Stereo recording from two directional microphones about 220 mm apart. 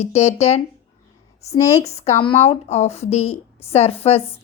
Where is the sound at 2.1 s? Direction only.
25° left (ahead or behind).